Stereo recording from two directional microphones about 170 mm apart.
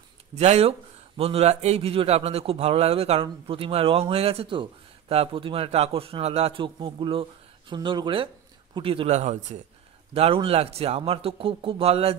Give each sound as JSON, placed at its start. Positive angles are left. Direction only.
{"t": 0.3, "sound": "speech", "side_deg": -40}